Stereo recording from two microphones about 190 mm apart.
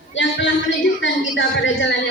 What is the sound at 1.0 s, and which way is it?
Speech, 75° left (ahead or behind).